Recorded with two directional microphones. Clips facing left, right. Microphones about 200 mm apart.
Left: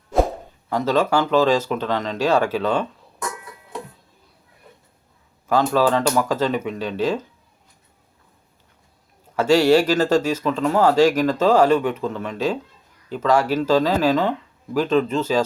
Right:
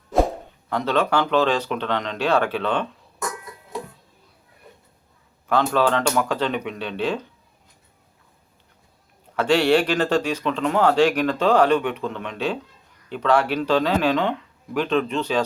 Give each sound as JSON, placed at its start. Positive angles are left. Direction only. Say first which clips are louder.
{"t": 0.7, "sound": "speech", "louder": "left 2 dB", "side_deg": 10}
{"t": 5.5, "sound": "speech", "louder": "left 2 dB", "side_deg": 10}
{"t": 9.3, "sound": "speech", "louder": "left 3 dB", "side_deg": 10}